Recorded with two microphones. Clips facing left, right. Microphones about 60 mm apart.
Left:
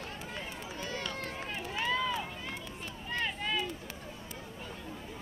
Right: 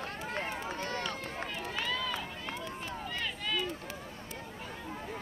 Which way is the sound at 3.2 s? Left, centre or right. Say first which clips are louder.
Left 2 dB; left.